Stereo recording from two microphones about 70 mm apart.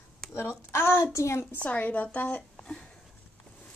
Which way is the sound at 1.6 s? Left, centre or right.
Centre.